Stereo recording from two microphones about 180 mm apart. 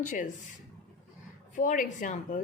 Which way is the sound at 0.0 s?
45° left (ahead or behind).